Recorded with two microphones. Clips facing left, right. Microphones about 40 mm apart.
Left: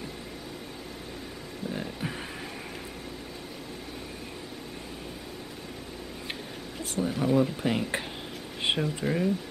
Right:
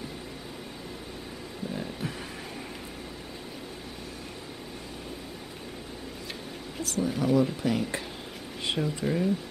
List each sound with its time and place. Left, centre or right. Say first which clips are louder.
1.7 s a sound: left 1 dB; centre
6.8 s speech: right 1 dB; left
7.1 s speech: even; centre
7.6 s speech: even; left
8.7 s speech: right 4 dB; centre